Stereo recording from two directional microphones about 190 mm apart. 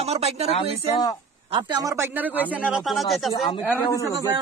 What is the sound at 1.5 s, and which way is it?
A man's voice, 25° right (ahead or behind).